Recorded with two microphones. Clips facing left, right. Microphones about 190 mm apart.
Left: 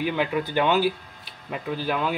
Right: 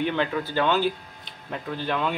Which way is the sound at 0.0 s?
10° left (ahead or behind).